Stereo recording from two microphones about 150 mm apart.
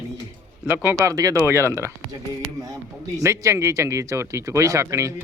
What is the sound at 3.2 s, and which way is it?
A man's voice, 20° right (ahead or behind).